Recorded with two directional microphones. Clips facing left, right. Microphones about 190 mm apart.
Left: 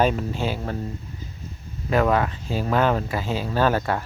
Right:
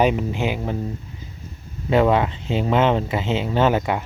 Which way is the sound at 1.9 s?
25° right (ahead or behind).